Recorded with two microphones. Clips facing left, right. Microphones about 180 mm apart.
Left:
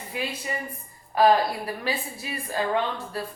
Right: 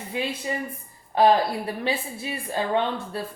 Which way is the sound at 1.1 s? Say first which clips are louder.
Right 1 dB; 25° right (ahead or behind).